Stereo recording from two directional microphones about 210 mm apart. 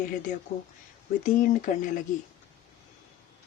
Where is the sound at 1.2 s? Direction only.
40° left (ahead or behind).